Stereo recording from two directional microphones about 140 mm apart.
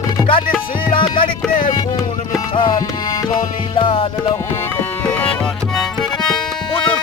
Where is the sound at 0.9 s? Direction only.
35° left (ahead or behind).